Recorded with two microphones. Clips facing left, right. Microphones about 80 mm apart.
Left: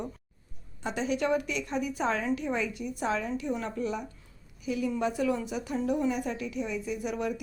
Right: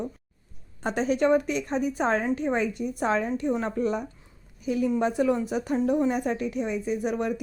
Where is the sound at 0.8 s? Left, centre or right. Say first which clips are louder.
Right 6 dB; right.